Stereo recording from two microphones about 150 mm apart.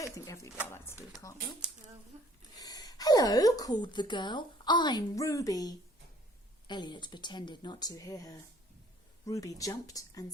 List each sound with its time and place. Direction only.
0.0 s speech: 20° left (ahead or behind)
2.6 s speech: 25° left (ahead or behind)